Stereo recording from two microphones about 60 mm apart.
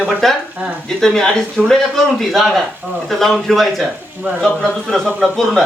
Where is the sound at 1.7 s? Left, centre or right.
Centre.